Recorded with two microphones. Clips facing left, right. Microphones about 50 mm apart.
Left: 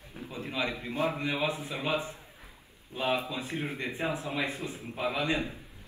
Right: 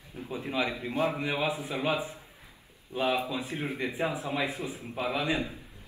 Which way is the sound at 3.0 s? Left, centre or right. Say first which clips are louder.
Right 1 dB; right.